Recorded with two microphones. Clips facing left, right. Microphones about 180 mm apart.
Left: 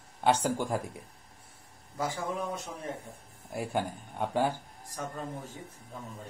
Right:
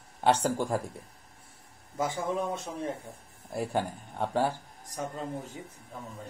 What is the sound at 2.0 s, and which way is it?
Speech, 20° right (ahead or behind).